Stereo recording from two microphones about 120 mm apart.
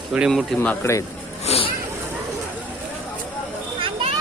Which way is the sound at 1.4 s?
55° left (ahead or behind).